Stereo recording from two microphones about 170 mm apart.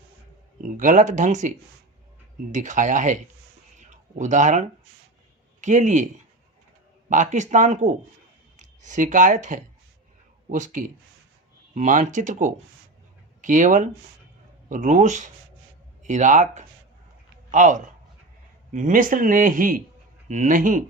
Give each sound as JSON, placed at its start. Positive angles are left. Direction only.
{"t": 0.8, "sound": "speech", "side_deg": -45}
{"t": 3.8, "sound": "a sound", "side_deg": -45}
{"t": 5.5, "sound": "a man's voice", "side_deg": -45}
{"t": 7.1, "sound": "speech", "side_deg": -45}